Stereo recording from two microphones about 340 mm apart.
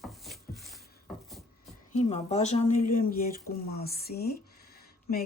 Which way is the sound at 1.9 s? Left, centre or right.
Centre.